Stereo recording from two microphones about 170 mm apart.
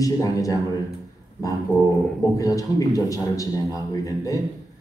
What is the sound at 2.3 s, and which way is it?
A man's voice, 20° left (ahead or behind).